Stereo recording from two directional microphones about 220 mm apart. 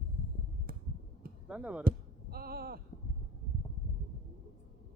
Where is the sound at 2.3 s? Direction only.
45° right (ahead or behind).